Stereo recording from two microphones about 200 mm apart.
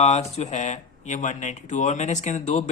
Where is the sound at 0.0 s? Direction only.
30° left (ahead or behind).